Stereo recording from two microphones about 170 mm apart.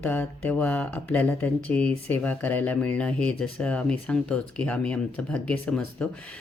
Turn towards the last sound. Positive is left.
turn(degrees=5)  # may be behind; listen again after turning